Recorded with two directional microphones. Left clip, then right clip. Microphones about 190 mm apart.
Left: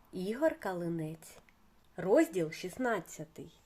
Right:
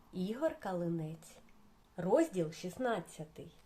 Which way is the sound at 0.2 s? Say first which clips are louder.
Left 5 dB; 45° left (ahead or behind).